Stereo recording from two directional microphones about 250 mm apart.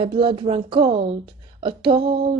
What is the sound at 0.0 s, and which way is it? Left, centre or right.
A woman's voice, right.